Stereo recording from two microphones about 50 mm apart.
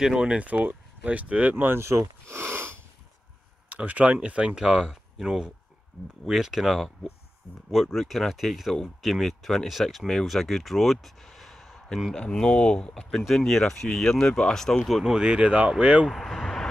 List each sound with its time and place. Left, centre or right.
0.0 s speech: centre
0.4 s speech: right
1.8 s speech: right
2.3 s a sound: right
3.6 s speech: right; by 14.9 s centre
15.0 s speech: centre
16.1 s speech: centre